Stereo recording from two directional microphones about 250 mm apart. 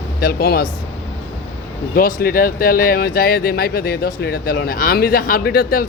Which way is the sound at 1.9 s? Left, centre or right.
Left.